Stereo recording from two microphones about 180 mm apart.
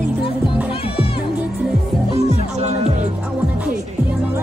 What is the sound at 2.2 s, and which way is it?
Music, 40° right (ahead or behind).